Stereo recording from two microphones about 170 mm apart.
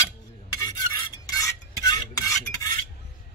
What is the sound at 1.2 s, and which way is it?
Filing, 20° left (ahead or behind).